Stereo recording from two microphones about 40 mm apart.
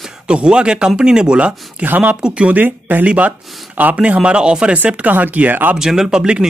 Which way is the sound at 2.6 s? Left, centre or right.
Right.